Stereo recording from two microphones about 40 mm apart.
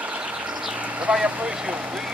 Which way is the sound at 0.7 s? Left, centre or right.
Right.